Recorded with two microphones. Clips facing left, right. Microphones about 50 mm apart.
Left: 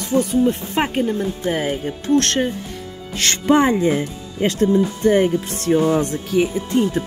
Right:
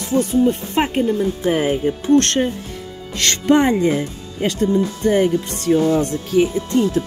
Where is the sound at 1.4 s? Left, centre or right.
Centre.